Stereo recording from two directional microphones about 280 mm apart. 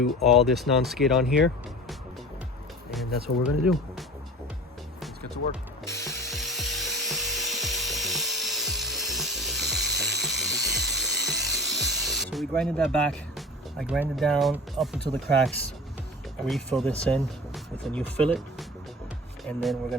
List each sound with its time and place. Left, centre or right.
0.2 s speech: centre
2.9 s speech: centre
5.8 s ratchet: centre
6.1 s dental drill: centre
15.1 s speech: centre